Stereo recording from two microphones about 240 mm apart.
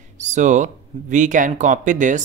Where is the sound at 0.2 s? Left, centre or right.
Right.